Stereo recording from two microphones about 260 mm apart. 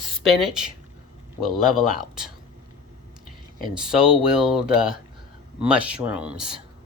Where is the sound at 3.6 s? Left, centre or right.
Centre.